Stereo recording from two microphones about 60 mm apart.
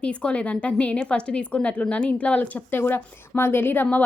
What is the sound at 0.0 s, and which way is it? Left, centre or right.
A woman's voice, centre.